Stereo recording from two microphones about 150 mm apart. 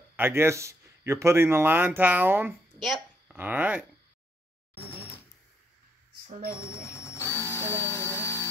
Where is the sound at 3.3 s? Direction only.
10° right (ahead or behind).